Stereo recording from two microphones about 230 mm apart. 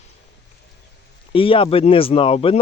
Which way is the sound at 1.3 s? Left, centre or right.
Left.